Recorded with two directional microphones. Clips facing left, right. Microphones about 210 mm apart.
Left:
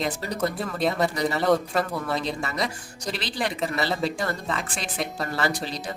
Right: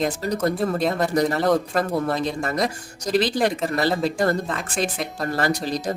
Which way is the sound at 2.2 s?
50° right (ahead or behind).